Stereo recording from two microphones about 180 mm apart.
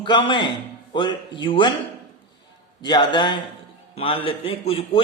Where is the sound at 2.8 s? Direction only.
25° left (ahead or behind).